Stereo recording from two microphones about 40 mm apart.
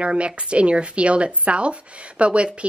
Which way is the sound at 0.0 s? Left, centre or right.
Right.